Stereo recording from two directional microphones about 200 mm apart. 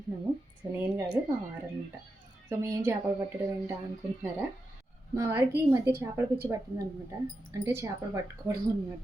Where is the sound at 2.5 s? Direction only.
10° right (ahead or behind).